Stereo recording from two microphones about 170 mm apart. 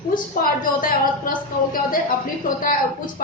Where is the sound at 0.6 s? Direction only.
55° left (ahead or behind).